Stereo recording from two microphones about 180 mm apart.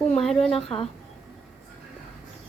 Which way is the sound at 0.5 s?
30° left (ahead or behind).